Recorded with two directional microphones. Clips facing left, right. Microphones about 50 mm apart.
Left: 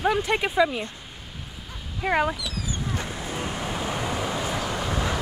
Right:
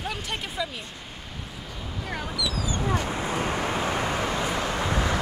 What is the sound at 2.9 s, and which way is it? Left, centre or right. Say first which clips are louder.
Vehicle: right 4 dB; right.